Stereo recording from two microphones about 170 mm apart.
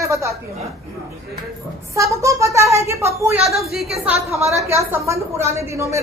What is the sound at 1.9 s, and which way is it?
A woman's voice, 15° right (ahead or behind).